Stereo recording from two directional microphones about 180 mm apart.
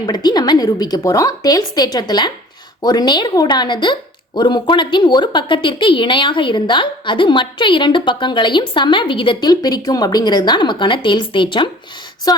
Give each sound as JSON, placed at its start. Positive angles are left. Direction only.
{"t": 0.0, "sound": "a woman's voice", "side_deg": 25}